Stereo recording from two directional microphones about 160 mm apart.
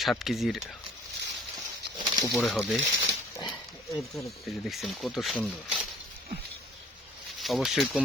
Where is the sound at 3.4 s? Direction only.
25° left (ahead or behind).